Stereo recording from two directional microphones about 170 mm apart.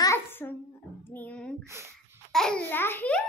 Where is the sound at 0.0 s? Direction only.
15° left (ahead or behind).